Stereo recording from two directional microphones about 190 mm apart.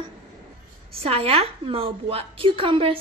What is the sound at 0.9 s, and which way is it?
A woman's voice, 30° right (ahead or behind).